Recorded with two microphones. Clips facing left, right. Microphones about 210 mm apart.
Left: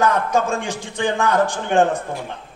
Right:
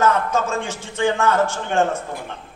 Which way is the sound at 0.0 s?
15° left (ahead or behind).